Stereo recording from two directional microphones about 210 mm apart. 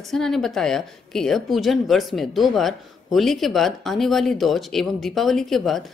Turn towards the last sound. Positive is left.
turn(degrees=0)  # may be behind; listen again after turning